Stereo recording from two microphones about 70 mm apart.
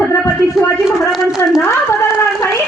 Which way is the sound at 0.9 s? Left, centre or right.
Centre.